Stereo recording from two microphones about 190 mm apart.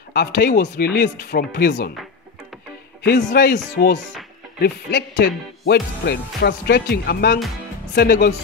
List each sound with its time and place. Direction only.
0.1 s speech: 55° left (ahead or behind)
1.5 s speech: 65° left (ahead or behind)
3.3 s speech: 55° left (ahead or behind)